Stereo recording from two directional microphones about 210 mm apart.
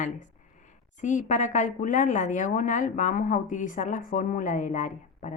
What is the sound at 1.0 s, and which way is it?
Speech, 35° left (ahead or behind).